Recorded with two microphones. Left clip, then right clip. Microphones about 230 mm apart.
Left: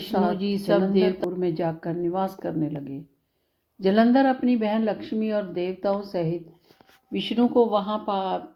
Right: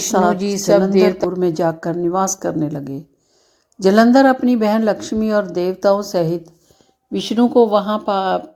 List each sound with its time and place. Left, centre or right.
0.1 s speech: right